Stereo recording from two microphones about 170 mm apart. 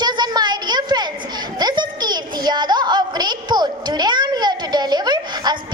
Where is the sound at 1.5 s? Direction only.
25° right (ahead or behind).